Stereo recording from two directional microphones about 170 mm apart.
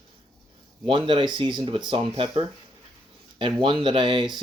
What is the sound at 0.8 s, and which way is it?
Speech, 30° right (ahead or behind).